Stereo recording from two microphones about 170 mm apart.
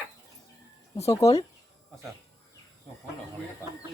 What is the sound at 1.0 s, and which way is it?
Speech, 20° left (ahead or behind).